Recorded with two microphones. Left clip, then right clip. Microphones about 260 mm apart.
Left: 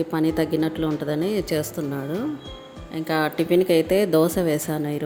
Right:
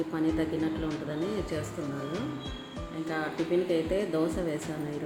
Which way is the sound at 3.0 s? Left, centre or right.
Left.